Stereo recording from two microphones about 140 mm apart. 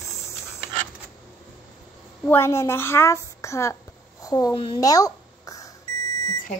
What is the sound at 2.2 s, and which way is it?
A child's voice, 15° left (ahead or behind).